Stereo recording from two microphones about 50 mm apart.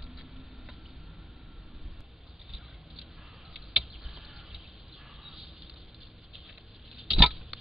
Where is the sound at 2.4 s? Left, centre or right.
Centre.